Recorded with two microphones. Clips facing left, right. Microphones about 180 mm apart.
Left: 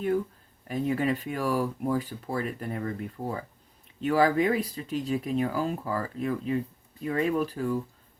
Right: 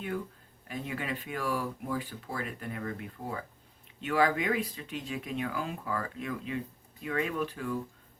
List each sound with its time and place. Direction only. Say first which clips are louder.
0.7 s speech: left 9 dB; 40° left (ahead or behind)